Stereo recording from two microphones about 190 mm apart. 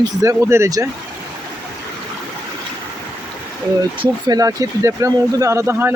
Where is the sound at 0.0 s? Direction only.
15° right (ahead or behind).